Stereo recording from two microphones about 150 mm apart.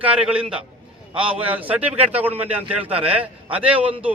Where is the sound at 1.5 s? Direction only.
10° right (ahead or behind).